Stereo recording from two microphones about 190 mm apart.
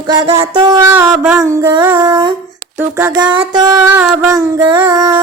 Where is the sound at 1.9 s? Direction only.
20° right (ahead or behind).